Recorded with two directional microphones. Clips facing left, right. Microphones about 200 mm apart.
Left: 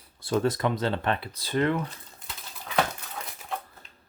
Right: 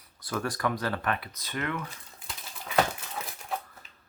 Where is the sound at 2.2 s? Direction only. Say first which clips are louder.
Right 1 dB; centre (ahead or behind).